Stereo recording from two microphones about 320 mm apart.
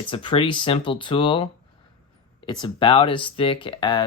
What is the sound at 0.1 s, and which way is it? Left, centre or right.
Speech, centre.